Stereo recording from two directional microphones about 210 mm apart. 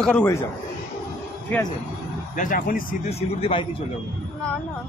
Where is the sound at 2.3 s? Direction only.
40° left (ahead or behind).